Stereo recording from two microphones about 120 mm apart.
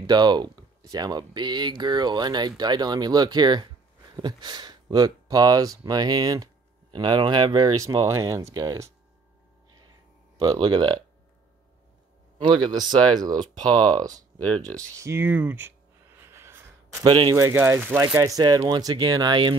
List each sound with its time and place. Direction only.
0.0 s speech: 35° right (ahead or behind)
10.5 s speech: 40° right (ahead or behind)
12.4 s speech: 40° right (ahead or behind)
14.9 s a sound: 25° right (ahead or behind)
17.0 s speech: 40° right (ahead or behind)
17.4 s speech: 25° right (ahead or behind)
18.0 s speech: 30° right (ahead or behind)